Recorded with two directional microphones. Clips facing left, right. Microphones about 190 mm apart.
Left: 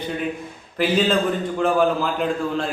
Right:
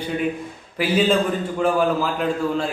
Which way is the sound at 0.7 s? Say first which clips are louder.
Right 1 dB; 10° right (ahead or behind).